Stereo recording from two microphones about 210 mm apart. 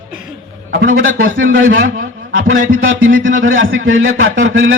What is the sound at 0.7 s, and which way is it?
Speech, 45° right (ahead or behind).